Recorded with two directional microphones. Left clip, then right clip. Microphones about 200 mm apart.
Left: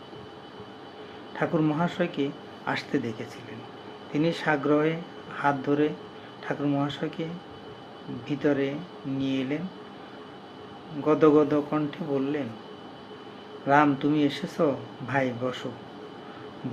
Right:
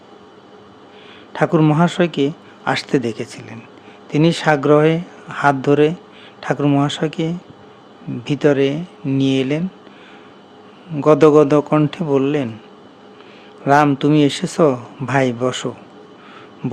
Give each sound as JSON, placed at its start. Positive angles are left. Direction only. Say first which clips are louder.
{"t": 1.3, "sound": "speech", "louder": "right 11 dB", "side_deg": -55}
{"t": 11.0, "sound": "speech", "louder": "right 10 dB", "side_deg": -60}
{"t": 13.7, "sound": "speech", "louder": "right 8 dB", "side_deg": -55}